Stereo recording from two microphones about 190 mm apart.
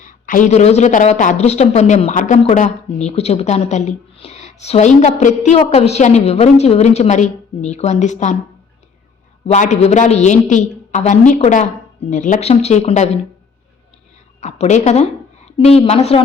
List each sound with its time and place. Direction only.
0.0 s a woman's voice: 45° left (ahead or behind)
9.5 s a woman's voice: 35° left (ahead or behind)
14.4 s a woman's voice: 35° left (ahead or behind)